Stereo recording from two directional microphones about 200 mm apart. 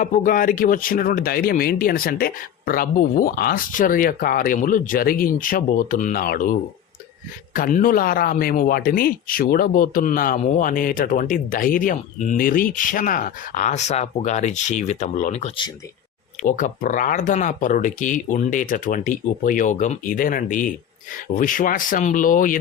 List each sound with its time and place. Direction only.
0.0 s speech: 40° left (ahead or behind)